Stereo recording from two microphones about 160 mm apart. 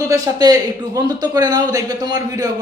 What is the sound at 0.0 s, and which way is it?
Speech, 20° right (ahead or behind).